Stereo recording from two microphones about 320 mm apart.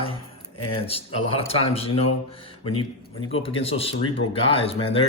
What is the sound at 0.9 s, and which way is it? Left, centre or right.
Speech, centre.